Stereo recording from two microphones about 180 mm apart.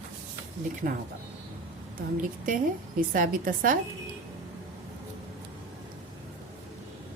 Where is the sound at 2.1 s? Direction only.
50° right (ahead or behind).